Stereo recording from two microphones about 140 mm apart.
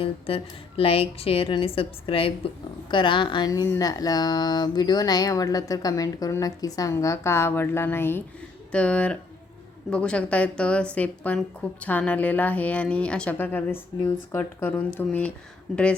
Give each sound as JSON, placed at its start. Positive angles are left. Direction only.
{"t": 0.0, "sound": "a woman's voice", "side_deg": 40}